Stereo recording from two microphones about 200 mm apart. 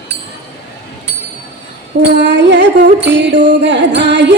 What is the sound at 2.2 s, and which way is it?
Music, 60° right (ahead or behind).